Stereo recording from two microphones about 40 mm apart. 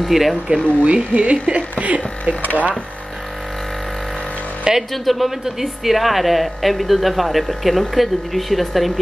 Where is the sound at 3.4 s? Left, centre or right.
Centre.